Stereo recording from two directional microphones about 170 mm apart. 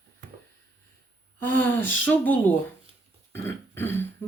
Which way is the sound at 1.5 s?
10° left (ahead or behind).